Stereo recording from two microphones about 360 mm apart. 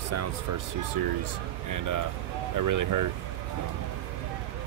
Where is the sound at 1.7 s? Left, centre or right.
Right.